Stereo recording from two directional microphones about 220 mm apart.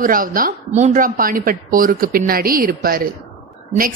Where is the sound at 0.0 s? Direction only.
40° right (ahead or behind).